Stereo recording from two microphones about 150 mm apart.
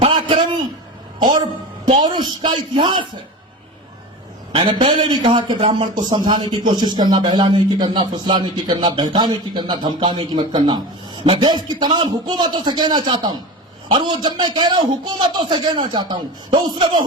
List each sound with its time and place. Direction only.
0.1 s a sound: 35° right (ahead or behind)
1.2 s a woman's voice: 25° right (ahead or behind)
4.5 s a man's voice: 35° right (ahead or behind)